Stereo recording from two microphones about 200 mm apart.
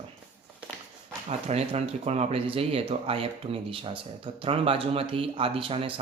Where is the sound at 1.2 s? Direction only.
30° right (ahead or behind).